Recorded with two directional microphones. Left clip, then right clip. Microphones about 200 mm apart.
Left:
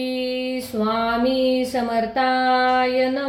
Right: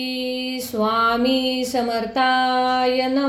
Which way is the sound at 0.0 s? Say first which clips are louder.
Left 1 dB; 30° right (ahead or behind).